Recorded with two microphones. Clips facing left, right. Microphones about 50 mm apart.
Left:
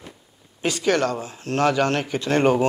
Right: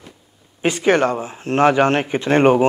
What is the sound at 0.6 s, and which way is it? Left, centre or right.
A man's voice, right.